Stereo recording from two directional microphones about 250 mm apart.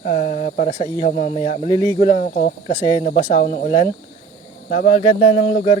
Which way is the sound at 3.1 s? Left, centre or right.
Left.